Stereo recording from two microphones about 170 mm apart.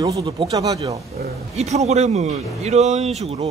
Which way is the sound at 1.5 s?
40° right (ahead or behind).